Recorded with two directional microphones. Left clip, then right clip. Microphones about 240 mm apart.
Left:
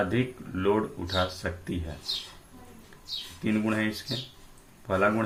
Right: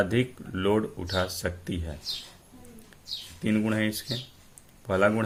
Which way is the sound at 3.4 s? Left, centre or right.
Right.